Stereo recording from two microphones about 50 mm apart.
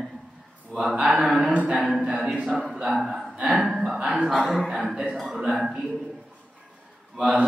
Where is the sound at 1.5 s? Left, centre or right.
Right.